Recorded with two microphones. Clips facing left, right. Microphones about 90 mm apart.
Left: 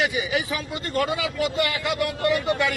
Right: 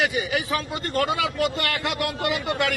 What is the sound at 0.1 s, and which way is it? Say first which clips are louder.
A man's voice: right 1 dB; 55° right (ahead or behind).